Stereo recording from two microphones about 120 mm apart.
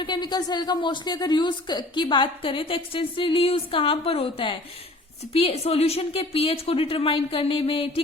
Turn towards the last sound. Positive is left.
turn(degrees=50)  # may be behind; listen again after turning